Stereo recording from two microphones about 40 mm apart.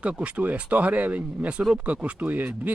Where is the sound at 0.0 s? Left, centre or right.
Right.